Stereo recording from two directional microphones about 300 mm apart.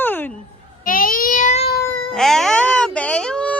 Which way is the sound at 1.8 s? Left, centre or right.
Centre.